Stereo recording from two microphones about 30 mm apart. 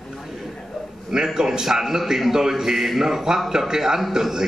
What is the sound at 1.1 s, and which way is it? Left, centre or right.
A man's voice, right.